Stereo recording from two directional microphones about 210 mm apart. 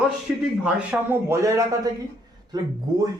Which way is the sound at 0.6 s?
10° right (ahead or behind).